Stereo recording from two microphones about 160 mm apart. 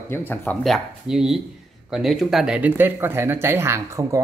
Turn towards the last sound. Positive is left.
turn(degrees=-20)  # may be behind; listen again after turning